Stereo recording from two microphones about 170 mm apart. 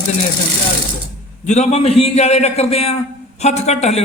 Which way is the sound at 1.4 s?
45° left (ahead or behind).